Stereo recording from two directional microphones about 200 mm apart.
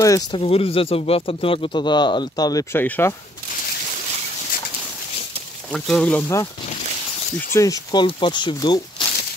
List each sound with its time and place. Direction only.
0.0 s speech: 15° left (ahead or behind)
0.4 s speech: 30° left (ahead or behind); by 3.2 s 10° left (ahead or behind)
5.7 s speech: 5° left (ahead or behind)
7.5 s speech: 15° left (ahead or behind)